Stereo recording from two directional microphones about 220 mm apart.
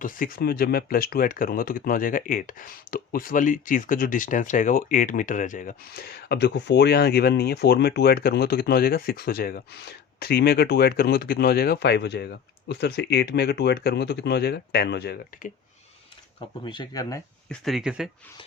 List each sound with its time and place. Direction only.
0.0 s speech: 40° left (ahead or behind)
16.6 s speech: 20° left (ahead or behind)
17.5 s speech: centre (ahead or behind)